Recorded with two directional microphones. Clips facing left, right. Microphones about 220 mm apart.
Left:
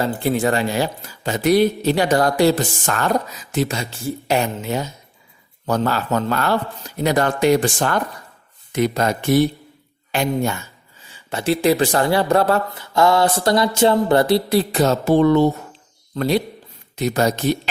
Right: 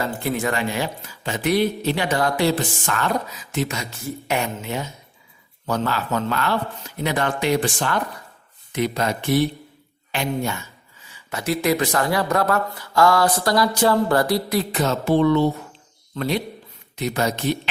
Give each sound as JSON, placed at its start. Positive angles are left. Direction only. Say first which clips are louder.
{"t": 0.0, "sound": "speech", "louder": "left 5 dB", "side_deg": 30}
{"t": 11.1, "sound": "speech", "louder": "left 4 dB", "side_deg": 30}